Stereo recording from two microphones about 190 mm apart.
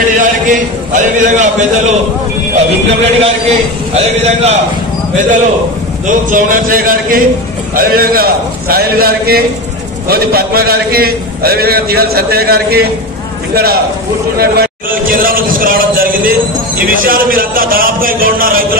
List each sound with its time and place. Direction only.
0.2 s a man's voice: 40° right (ahead or behind)
3.0 s a man's voice: 30° right (ahead or behind)
6.0 s a man's voice: 45° right (ahead or behind)
14.4 s a man's voice: 50° right (ahead or behind)